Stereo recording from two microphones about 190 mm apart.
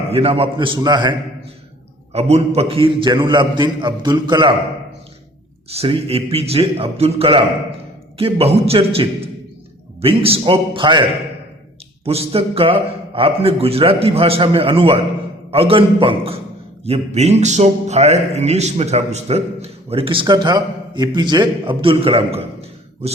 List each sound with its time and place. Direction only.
0.1 s a man's voice: 30° right (ahead or behind)
2.1 s a man's voice: 35° right (ahead or behind)
5.7 s music: 30° right (ahead or behind)
10.0 s a man's voice: 30° right (ahead or behind)
12.0 s a man's voice: 30° right (ahead or behind)
16.8 s music: 35° right (ahead or behind)